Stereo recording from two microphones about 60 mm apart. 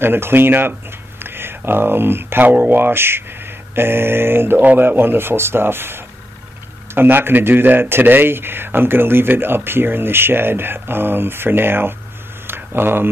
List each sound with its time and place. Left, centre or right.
0.0 s speech: right
2.8 s speech: right
12.4 s a sound: right